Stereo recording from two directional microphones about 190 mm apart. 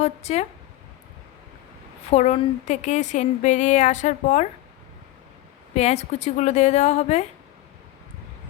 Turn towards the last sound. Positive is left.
turn(degrees=35)  # may be behind; listen again after turning